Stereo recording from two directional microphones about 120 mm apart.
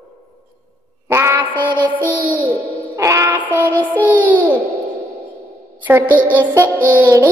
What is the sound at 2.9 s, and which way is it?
Music, 25° right (ahead or behind).